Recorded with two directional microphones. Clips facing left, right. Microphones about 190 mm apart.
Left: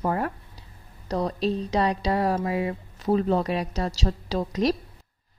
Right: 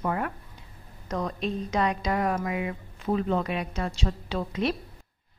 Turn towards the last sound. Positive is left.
turn(degrees=40)  # may be behind; listen again after turning